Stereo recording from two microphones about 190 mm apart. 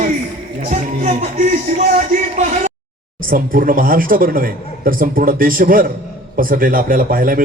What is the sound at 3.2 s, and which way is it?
Speech, 50° right (ahead or behind).